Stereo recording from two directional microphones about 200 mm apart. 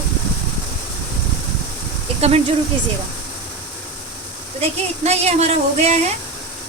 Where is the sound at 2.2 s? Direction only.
30° right (ahead or behind).